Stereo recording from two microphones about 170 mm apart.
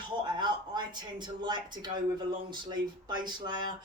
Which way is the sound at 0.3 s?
25° right (ahead or behind).